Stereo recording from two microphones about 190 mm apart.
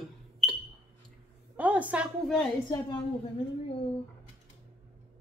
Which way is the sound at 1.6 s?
5° right (ahead or behind).